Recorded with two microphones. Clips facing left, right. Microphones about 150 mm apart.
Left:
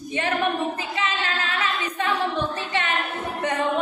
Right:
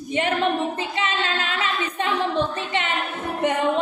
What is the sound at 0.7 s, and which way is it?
Child singing, 25° right (ahead or behind).